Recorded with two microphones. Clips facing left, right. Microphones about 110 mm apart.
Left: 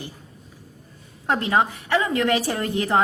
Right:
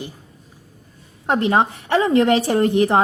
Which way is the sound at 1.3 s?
30° right (ahead or behind).